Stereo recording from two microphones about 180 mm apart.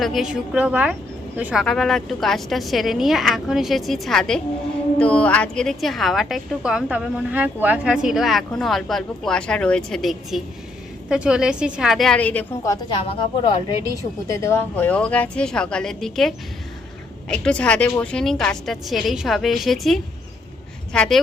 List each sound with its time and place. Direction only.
0.0 s a woman's voice: centre (ahead or behind)
12.7 s a woman's voice: 30° left (ahead or behind); by 21.2 s 5° left (ahead or behind)